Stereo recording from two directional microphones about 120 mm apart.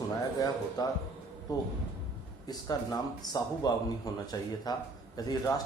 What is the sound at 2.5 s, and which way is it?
Speech, 30° left (ahead or behind).